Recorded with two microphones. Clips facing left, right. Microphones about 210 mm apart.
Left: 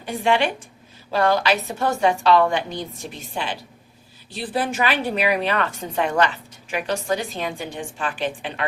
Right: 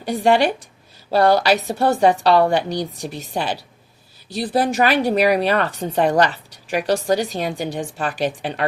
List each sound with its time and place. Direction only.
0.0 s a woman's voice: 40° right (ahead or behind)